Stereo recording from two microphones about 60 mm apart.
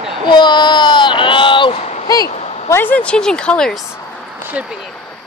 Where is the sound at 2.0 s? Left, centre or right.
Left.